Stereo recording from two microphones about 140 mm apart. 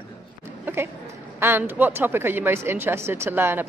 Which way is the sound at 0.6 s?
15° right (ahead or behind).